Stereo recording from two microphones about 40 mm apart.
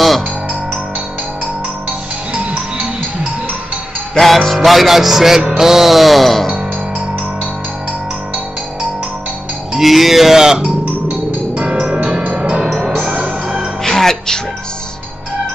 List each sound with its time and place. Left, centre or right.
2.3 s music: right
4.2 s music: centre
9.8 s music: centre
12.4 s music: right
13.0 s music: right
13.8 s music: centre